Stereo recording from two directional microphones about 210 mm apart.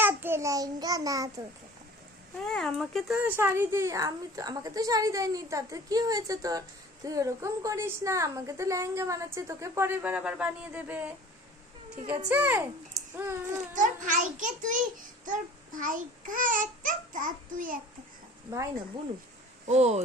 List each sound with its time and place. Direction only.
0.0 s a child's voice: 10° right (ahead or behind)
2.4 s speech: centre (ahead or behind)
12.3 s speech: 10° right (ahead or behind)
13.7 s a child's voice: 35° right (ahead or behind)
15.2 s babbling: 40° right (ahead or behind)
19.6 s a child's voice: 30° right (ahead or behind)